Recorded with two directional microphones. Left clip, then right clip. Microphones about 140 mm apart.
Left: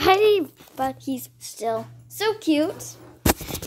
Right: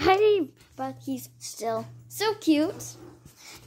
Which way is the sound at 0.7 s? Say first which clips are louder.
Left 12 dB; 45° left (ahead or behind).